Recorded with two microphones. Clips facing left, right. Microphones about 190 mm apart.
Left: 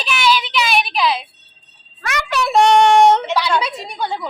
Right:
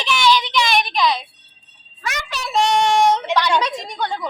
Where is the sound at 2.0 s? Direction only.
60° left (ahead or behind).